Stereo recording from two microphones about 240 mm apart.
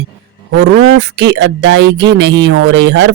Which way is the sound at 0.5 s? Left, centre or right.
Right.